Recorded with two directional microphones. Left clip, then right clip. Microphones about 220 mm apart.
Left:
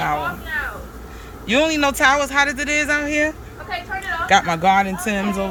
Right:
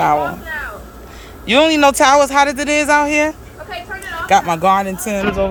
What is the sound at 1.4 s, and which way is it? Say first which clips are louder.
Speech: right 6 dB; 10° right (ahead or behind).